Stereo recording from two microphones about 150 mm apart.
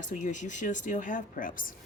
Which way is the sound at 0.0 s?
55° left (ahead or behind).